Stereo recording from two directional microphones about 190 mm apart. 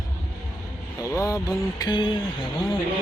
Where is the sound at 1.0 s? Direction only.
15° left (ahead or behind).